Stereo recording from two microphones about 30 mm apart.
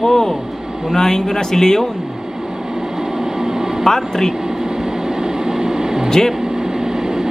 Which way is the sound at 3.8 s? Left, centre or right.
Centre.